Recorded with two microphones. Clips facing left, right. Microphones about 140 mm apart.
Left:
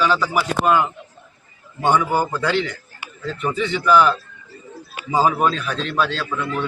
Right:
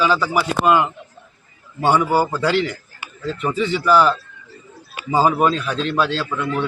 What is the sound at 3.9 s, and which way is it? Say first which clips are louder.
Speech: even; 40° right (ahead or behind).